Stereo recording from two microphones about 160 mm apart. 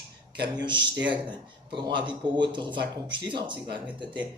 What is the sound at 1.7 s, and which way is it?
Speech, 30° right (ahead or behind).